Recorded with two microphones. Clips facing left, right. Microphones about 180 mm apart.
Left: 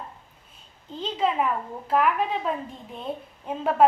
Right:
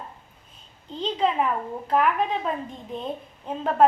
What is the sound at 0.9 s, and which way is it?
A woman's voice, 5° left (ahead or behind).